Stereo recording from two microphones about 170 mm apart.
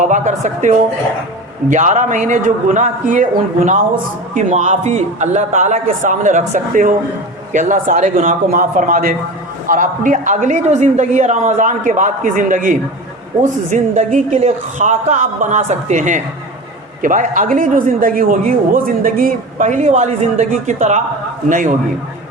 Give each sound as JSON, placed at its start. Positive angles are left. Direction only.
{"t": 0.0, "sound": "a man's voice", "side_deg": -45}